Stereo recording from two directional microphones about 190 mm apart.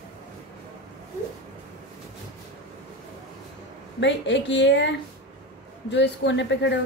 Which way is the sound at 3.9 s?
70° left (ahead or behind).